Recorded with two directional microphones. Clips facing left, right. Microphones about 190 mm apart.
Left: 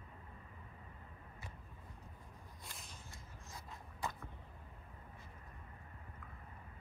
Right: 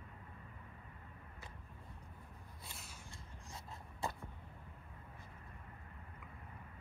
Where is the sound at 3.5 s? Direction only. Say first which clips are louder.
Right 1 dB; 30° right (ahead or behind).